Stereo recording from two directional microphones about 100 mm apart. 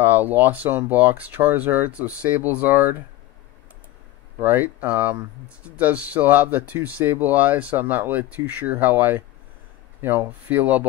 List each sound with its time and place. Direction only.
0.0 s speech: 20° right (ahead or behind)
4.4 s speech: 20° right (ahead or behind)